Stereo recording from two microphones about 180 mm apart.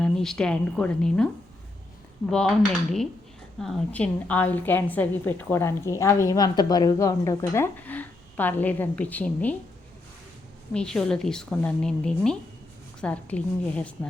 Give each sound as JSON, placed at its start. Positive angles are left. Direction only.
{"t": 0.0, "sound": "a woman's voice", "side_deg": 5}
{"t": 2.3, "sound": "a woman's voice", "side_deg": 0}
{"t": 10.8, "sound": "a woman's voice", "side_deg": 5}